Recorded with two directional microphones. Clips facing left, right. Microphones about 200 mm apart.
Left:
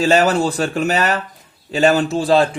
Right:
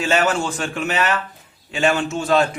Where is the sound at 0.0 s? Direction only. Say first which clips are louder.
Left 5 dB; 35° left (ahead or behind).